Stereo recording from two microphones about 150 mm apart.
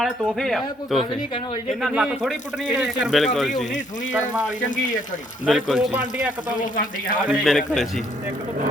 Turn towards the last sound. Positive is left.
turn(degrees=0)  # may be behind; listen again after turning